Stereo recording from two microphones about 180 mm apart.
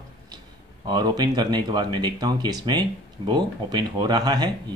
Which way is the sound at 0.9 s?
25° right (ahead or behind).